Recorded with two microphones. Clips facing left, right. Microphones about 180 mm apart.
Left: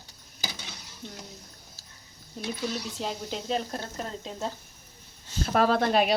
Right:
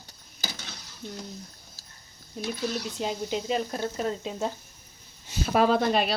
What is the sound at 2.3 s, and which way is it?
Speech, centre (ahead or behind).